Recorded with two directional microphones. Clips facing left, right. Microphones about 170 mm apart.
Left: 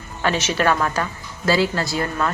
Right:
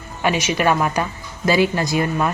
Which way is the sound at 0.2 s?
10° right (ahead or behind).